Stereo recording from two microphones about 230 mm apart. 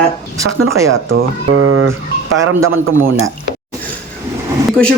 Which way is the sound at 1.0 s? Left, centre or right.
Right.